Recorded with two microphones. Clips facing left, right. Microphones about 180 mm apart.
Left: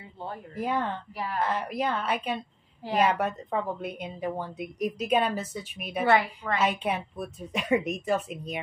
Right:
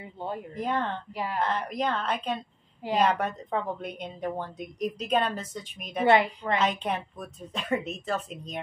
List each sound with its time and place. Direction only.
0.6 s a woman's voice: 5° left (ahead or behind)
1.1 s a woman's voice: 20° right (ahead or behind)
1.4 s a woman's voice: 5° left (ahead or behind)
6.0 s a woman's voice: 20° right (ahead or behind)
6.6 s a woman's voice: 10° left (ahead or behind)